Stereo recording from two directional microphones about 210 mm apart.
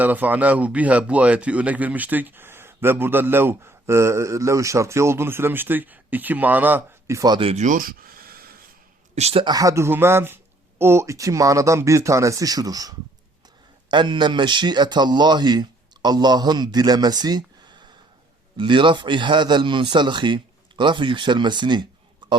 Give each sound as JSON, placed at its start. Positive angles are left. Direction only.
{"t": 0.0, "sound": "speech", "side_deg": -10}
{"t": 9.1, "sound": "a man's voice", "side_deg": -30}